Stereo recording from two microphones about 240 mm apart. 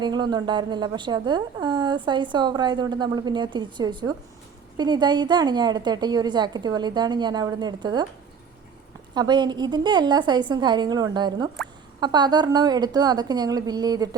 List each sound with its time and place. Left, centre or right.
0.0 s a woman's voice: centre
9.1 s a woman's voice: centre